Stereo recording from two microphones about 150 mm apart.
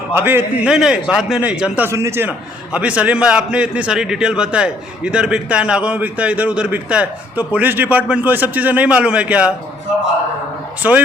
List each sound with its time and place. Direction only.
0.1 s a man's voice: 15° right (ahead or behind)
1.9 s a man's voice: 20° right (ahead or behind)
10.8 s a man's voice: 10° right (ahead or behind)